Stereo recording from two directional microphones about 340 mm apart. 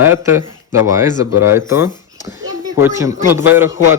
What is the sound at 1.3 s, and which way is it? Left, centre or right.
Speech, left.